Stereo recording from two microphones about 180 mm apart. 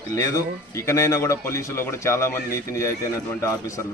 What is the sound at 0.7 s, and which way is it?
A man's voice, 15° left (ahead or behind).